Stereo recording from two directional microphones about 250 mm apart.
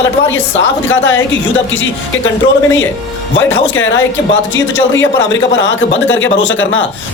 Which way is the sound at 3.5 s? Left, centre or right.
Left.